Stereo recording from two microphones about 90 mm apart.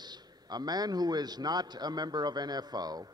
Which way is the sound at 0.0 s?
50° right (ahead or behind).